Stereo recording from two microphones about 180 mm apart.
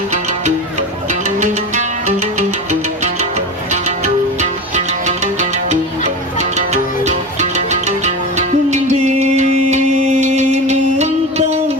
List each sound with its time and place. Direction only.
1.4 s music: 40° right (ahead or behind)